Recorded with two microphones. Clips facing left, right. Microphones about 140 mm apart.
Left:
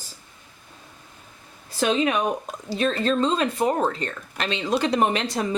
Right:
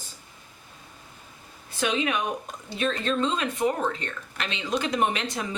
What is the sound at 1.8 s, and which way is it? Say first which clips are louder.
Speech: left 5 dB; 35° left (ahead or behind).